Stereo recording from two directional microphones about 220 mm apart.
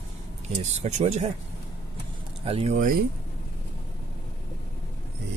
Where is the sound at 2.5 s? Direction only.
30° right (ahead or behind).